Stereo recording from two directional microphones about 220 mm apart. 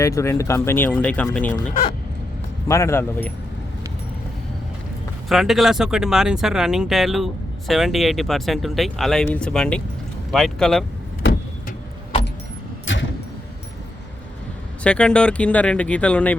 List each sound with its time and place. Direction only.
0.0 s speech: 15° left (ahead or behind)
2.6 s speech: 15° left (ahead or behind)
5.3 s speech: centre (ahead or behind)
12.8 s vehicle: 60° left (ahead or behind)
14.8 s speech: 5° left (ahead or behind)